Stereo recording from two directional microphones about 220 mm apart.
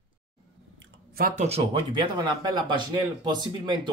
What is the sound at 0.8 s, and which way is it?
Speech, 40° right (ahead or behind).